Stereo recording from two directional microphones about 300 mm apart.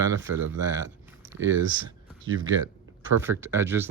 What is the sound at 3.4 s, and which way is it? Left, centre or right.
Speech, centre.